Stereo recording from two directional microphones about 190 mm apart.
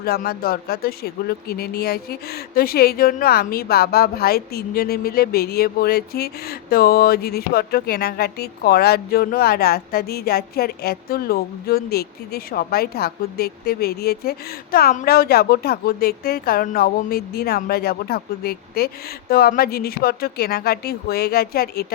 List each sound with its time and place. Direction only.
0.0 s a woman's voice: 55° left (ahead or behind)